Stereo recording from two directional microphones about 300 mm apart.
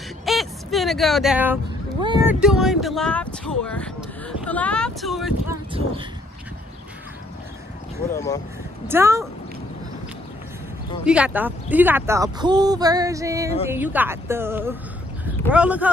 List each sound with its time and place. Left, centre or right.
0.2 s a sound: centre
2.4 s speech: centre
8.8 s speech: centre
11.1 s speech: centre